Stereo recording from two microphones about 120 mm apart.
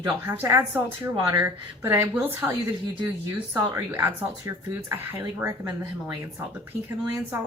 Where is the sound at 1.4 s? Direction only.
20° right (ahead or behind).